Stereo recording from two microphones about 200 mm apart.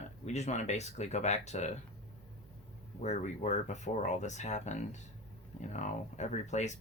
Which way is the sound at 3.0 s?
35° left (ahead or behind).